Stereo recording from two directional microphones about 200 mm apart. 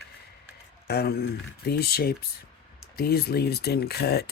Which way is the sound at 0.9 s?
50° left (ahead or behind).